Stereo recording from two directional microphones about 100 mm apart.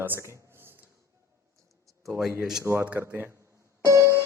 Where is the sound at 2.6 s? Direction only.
25° right (ahead or behind).